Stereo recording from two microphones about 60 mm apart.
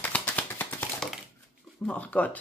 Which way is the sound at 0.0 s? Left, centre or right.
Left.